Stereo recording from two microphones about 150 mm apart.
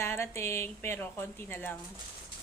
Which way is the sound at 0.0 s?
15° left (ahead or behind).